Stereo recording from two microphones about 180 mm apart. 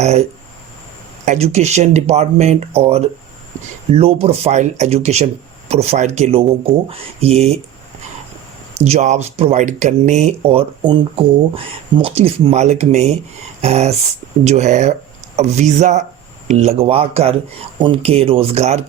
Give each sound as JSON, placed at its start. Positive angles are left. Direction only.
{"t": 0.0, "sound": "speech", "side_deg": -40}
{"t": 8.8, "sound": "speech", "side_deg": -40}